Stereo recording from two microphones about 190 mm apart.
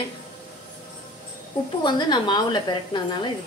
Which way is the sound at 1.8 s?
25° left (ahead or behind).